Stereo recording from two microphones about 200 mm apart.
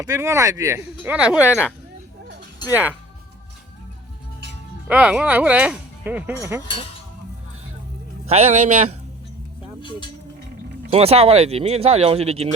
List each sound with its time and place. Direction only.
0.0 s speech: 15° right (ahead or behind)
2.6 s speech: 10° right (ahead or behind)
4.9 s speech: 5° right (ahead or behind)
8.3 s speech: 35° right (ahead or behind)
10.9 s speech: 30° right (ahead or behind)